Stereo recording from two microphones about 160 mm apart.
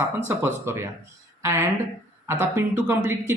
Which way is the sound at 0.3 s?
15° right (ahead or behind).